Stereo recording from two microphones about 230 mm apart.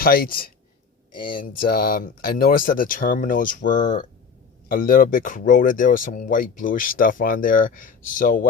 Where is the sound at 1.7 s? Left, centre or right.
Left.